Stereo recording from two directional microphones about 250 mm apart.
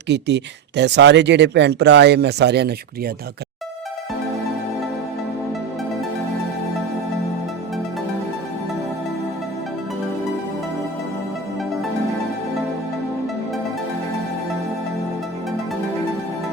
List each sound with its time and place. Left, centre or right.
0.1 s speech: right